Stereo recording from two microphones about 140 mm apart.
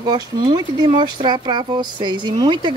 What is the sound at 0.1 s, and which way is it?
Speech, 35° right (ahead or behind).